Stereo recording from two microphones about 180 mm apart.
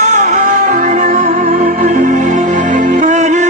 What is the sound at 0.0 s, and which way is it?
Music, 40° right (ahead or behind).